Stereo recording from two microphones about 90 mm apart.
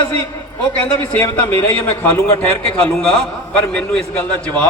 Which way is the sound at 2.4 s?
10° left (ahead or behind).